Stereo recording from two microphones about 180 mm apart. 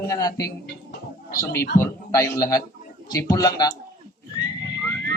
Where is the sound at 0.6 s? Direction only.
60° left (ahead or behind).